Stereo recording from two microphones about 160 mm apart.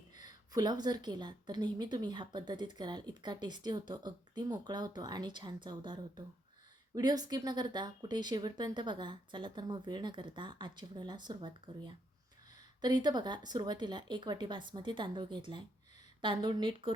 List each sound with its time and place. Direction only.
0.3 s a woman's voice: 25° right (ahead or behind)
12.8 s a woman's voice: 25° right (ahead or behind)